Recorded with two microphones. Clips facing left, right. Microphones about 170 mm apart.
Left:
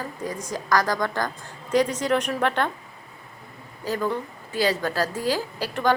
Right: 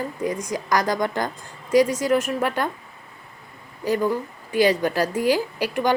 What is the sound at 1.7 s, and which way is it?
A woman's voice, 10° right (ahead or behind).